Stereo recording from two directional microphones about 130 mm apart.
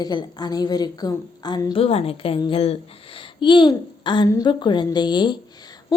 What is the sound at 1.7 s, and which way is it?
A woman's voice, 50° left (ahead or behind).